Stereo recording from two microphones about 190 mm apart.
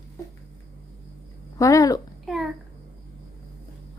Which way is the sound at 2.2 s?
Centre (ahead or behind).